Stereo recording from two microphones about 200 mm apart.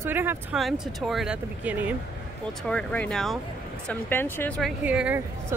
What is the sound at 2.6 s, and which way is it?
Speech, 5° left (ahead or behind).